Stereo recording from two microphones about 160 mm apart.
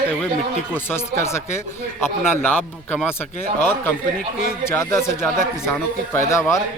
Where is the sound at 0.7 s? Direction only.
15° left (ahead or behind).